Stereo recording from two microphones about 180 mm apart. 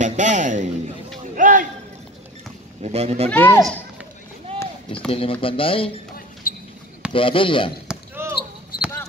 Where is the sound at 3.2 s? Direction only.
10° left (ahead or behind).